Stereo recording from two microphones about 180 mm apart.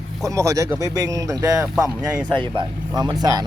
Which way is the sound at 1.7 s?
5° right (ahead or behind).